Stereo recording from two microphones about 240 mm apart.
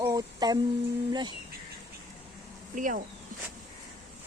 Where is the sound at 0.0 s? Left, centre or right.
Centre.